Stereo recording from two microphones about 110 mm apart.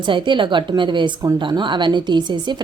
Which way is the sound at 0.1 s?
50° right (ahead or behind).